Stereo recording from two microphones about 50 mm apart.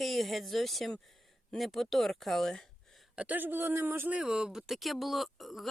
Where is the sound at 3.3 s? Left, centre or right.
Right.